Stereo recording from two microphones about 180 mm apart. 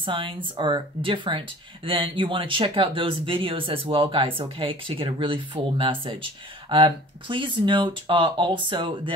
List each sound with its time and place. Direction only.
0.0 s speech: 25° right (ahead or behind)